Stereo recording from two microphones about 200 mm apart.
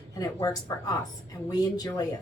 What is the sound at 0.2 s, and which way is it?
A woman's voice, 20° left (ahead or behind).